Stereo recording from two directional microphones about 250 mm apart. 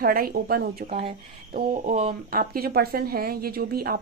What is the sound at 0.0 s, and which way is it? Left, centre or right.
Speech, right.